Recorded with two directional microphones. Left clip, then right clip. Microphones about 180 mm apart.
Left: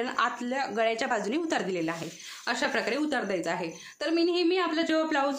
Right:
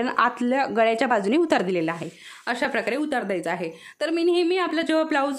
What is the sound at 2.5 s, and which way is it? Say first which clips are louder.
A woman's voice: right 4 dB; 35° right (ahead or behind).